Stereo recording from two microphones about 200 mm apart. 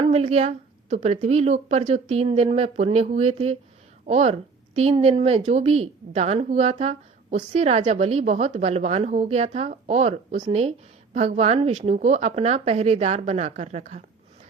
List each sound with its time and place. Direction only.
0.1 s a woman's voice: 30° right (ahead or behind)